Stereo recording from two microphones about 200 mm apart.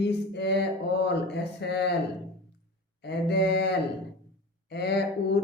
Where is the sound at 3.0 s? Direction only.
55° left (ahead or behind).